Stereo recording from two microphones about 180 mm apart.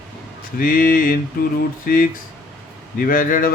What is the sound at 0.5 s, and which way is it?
A man's voice, 50° left (ahead or behind).